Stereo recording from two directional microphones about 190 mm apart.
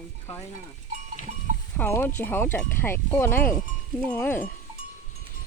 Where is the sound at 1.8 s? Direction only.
10° left (ahead or behind).